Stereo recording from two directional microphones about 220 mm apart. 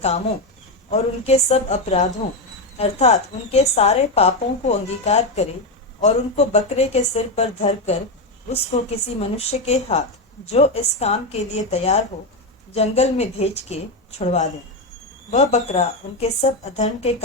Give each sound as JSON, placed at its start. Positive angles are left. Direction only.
{"t": 0.9, "sound": "a woman's voice", "side_deg": 30}